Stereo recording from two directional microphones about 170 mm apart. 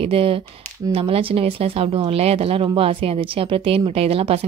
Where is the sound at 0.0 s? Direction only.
35° right (ahead or behind).